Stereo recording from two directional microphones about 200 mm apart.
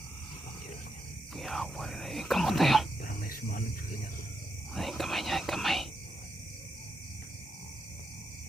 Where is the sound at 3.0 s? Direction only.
45° left (ahead or behind).